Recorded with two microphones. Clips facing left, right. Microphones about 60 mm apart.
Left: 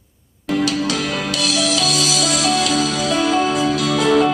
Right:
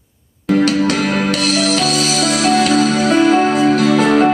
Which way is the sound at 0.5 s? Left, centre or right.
Right.